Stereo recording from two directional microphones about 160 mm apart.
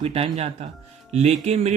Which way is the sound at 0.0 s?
40° right (ahead or behind).